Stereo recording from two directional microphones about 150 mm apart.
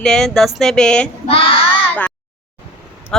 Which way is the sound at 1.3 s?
40° left (ahead or behind).